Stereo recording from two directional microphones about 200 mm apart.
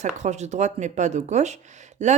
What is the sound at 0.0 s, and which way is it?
A woman's voice, 35° right (ahead or behind).